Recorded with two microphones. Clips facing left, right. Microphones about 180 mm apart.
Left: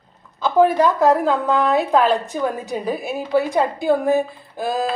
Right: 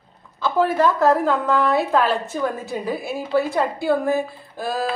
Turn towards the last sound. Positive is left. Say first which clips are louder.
# left 3 dB
turn(degrees=20)  # may be behind; listen again after turning